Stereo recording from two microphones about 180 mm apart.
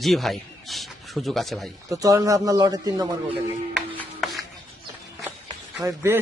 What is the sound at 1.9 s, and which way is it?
Speech, 20° right (ahead or behind).